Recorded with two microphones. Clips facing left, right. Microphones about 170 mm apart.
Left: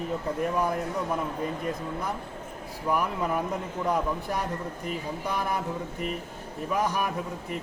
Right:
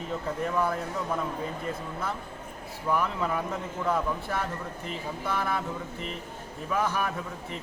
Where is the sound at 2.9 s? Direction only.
10° left (ahead or behind).